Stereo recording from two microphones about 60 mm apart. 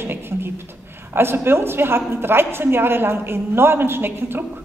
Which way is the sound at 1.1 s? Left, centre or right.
Right.